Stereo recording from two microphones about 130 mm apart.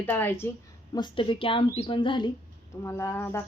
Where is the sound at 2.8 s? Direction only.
20° left (ahead or behind).